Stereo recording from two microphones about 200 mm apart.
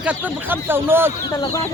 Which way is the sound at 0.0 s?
10° right (ahead or behind).